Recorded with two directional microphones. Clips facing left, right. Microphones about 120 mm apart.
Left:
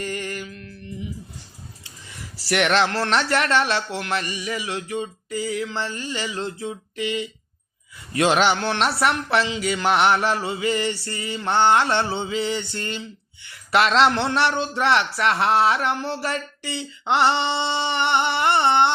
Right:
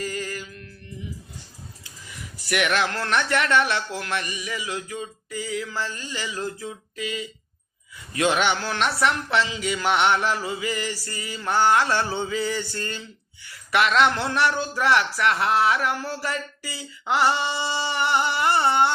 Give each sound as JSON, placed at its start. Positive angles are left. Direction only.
{"t": 2.0, "sound": "mantra", "side_deg": 30}